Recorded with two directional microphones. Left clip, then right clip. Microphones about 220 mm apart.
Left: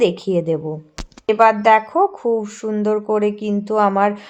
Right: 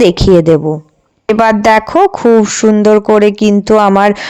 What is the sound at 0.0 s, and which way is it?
Speech, 40° right (ahead or behind).